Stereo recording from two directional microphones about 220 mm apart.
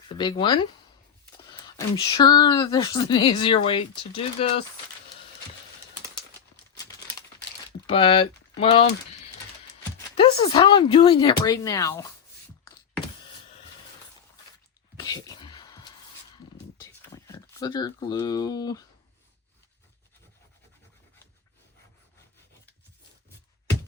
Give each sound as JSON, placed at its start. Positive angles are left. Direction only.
{"t": 0.1, "sound": "speech", "side_deg": 20}
{"t": 7.9, "sound": "speech", "side_deg": 25}
{"t": 10.2, "sound": "speech", "side_deg": 25}
{"t": 14.9, "sound": "a sound", "side_deg": 15}
{"t": 17.2, "sound": "speech", "side_deg": 15}